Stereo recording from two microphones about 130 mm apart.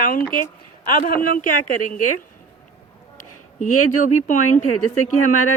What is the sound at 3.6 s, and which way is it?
Speech, 80° left.